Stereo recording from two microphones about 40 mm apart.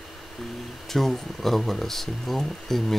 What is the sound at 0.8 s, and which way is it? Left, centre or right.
Speech, centre.